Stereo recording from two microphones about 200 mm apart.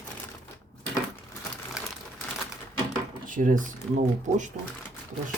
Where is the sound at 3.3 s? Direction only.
40° right (ahead or behind).